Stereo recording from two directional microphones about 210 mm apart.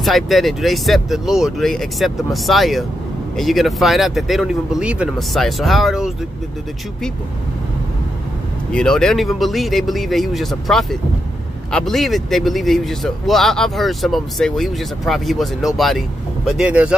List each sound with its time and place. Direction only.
0.0 s speech: centre (ahead or behind)
8.7 s speech: 5° left (ahead or behind)